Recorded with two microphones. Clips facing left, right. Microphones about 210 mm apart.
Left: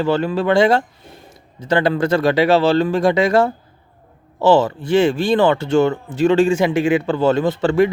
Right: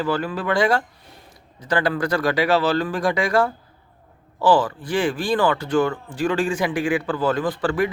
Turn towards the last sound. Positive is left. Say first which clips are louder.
# left 6 dB
turn(degrees=25)  # may be behind; listen again after turning